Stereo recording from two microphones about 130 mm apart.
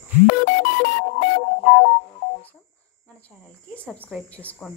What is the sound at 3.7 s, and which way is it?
Speech, 10° left (ahead or behind).